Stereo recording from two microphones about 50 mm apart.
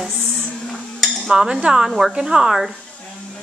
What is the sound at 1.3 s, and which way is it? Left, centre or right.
Speech, centre.